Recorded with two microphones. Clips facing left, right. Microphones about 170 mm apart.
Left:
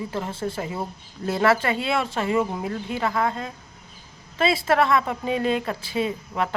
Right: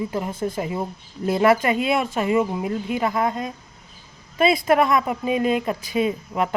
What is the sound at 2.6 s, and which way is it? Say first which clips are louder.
Speech: right 3 dB; 15° right (ahead or behind).